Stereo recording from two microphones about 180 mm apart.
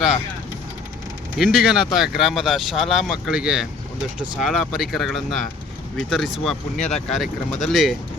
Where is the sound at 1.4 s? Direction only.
Centre (ahead or behind).